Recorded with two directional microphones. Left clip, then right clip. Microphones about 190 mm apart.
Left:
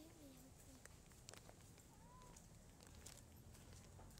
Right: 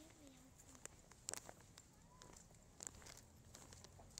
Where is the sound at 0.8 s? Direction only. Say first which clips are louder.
Right 4 dB; 60° right (ahead or behind).